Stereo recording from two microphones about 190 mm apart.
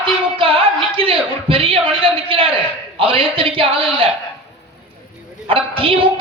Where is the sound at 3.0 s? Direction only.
30° right (ahead or behind).